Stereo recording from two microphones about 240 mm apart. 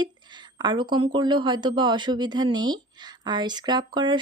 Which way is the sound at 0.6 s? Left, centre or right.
Centre.